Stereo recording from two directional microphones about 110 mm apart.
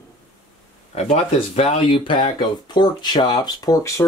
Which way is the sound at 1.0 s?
85° left.